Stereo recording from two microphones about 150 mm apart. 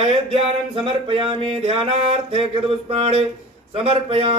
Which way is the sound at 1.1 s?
35° right (ahead or behind).